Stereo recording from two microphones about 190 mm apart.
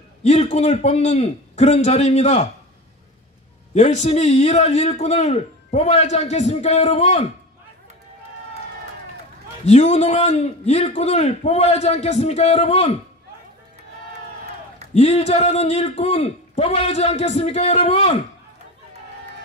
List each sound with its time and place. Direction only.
0.2 s a man's voice: 35° left (ahead or behind)
3.7 s a man's voice: 35° left (ahead or behind)
9.7 s a man's voice: 35° left (ahead or behind)
15.0 s a man's voice: 35° left (ahead or behind)